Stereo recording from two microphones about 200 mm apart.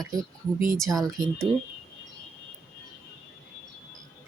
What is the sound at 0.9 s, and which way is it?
Speech, 15° right (ahead or behind).